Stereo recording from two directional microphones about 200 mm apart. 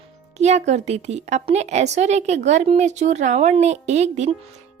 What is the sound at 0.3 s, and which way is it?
Speech, 35° right (ahead or behind).